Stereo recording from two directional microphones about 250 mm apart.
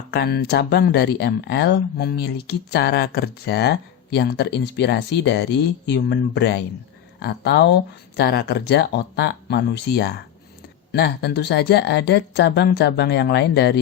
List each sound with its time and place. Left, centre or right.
0.1 s speech: left